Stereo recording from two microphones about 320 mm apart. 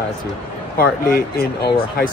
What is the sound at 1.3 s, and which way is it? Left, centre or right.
Speech, left.